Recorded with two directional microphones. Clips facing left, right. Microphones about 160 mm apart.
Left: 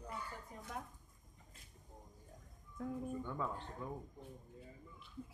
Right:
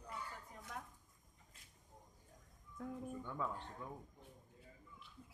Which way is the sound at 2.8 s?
Centre (ahead or behind).